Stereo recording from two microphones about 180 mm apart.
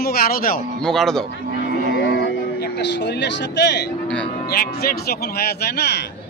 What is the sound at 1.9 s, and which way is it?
Music, 75° left (ahead or behind).